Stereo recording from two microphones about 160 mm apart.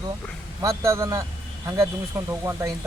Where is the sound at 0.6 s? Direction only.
20° right (ahead or behind).